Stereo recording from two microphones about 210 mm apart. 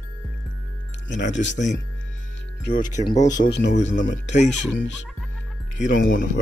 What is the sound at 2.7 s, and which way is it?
Speech, 40° left (ahead or behind).